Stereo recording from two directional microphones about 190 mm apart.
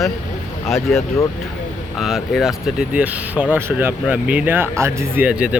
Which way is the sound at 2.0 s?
Centre (ahead or behind).